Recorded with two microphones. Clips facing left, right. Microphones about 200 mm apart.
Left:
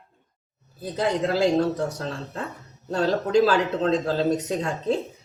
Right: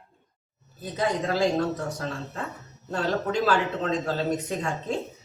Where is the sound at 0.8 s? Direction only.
35° left (ahead or behind).